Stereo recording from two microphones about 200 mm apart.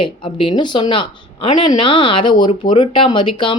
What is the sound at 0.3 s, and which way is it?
Speech, 25° left (ahead or behind).